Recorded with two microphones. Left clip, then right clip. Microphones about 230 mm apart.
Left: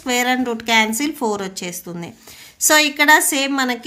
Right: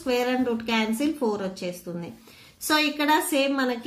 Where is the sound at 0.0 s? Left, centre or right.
Left.